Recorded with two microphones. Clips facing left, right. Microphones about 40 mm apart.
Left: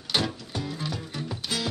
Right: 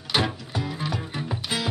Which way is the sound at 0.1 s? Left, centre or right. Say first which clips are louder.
Right 3 dB; centre.